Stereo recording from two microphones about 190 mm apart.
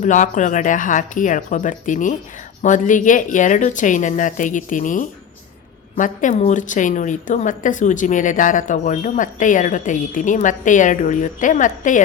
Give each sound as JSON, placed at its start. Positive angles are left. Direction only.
{"t": 0.0, "sound": "a woman's voice", "side_deg": 40}